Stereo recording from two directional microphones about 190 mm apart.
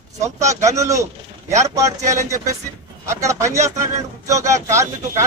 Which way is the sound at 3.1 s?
15° right (ahead or behind).